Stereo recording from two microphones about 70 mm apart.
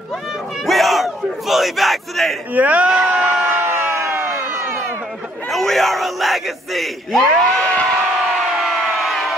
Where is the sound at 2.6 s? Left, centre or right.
Right.